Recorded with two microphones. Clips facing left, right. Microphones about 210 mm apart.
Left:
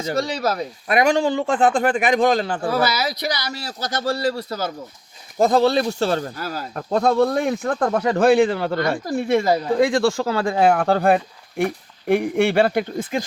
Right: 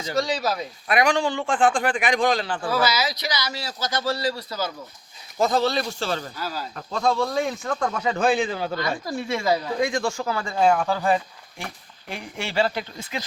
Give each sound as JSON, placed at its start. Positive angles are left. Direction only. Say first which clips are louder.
{"t": 0.0, "sound": "speech", "louder": "left 2 dB", "side_deg": 55}
{"t": 9.7, "sound": "speech", "louder": "left 7 dB", "side_deg": 90}